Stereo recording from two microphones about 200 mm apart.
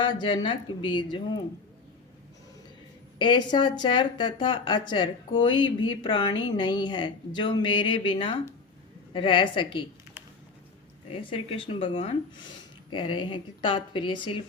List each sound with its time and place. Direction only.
0.0 s speech: 20° left (ahead or behind)
3.2 s a woman's voice: 20° left (ahead or behind)
11.1 s speech: 25° left (ahead or behind)